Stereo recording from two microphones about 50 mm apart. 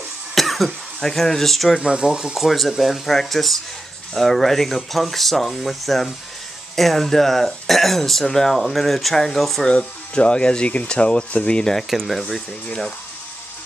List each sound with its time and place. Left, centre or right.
0.3 s speech: centre
1.8 s speech: centre
2.3 s speech: centre
9.7 s speech: left
12.1 s speech: centre